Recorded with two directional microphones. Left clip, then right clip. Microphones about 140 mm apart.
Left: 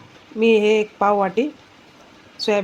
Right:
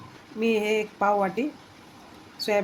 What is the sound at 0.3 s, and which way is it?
A woman's voice, 45° left (ahead or behind).